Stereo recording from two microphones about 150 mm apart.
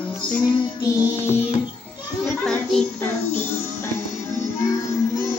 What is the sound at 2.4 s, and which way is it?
Music, 5° left (ahead or behind).